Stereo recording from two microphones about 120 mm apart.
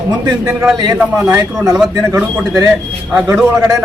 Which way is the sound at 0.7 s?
35° right (ahead or behind).